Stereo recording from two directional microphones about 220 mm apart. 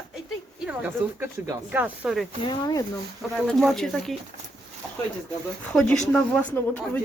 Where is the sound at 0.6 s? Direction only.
10° right (ahead or behind).